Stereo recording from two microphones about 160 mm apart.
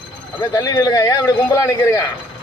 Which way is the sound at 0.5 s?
20° left (ahead or behind).